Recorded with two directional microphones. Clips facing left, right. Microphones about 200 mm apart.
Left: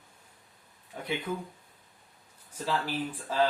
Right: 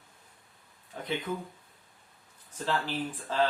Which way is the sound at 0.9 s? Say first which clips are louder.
Even; 10° left (ahead or behind).